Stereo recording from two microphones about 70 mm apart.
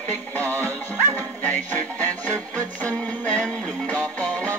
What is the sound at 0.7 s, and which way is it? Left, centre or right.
Music, left.